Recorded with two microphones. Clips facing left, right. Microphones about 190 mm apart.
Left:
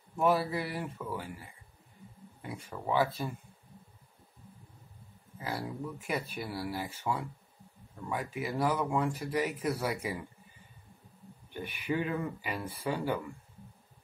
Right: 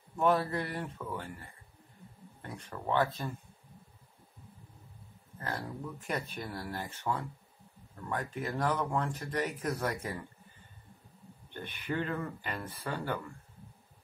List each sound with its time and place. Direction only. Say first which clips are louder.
0.1 s speech: even; 5° left (ahead or behind)
5.4 s speech: left 2 dB; 10° left (ahead or behind)
11.5 s speech: left 2 dB; 10° left (ahead or behind)